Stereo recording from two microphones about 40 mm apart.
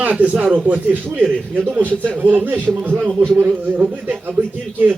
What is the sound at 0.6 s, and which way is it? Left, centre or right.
Speech, right.